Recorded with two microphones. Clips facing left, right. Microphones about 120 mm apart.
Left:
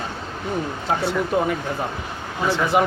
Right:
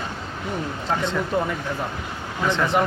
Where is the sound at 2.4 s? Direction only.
5° left (ahead or behind).